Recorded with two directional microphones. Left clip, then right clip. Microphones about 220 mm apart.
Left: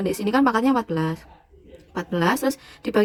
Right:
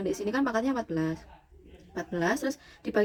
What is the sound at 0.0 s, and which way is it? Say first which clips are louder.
Speech: left 9 dB; 30° left (ahead or behind).